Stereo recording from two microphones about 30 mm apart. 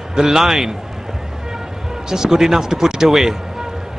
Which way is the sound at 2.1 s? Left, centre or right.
Centre.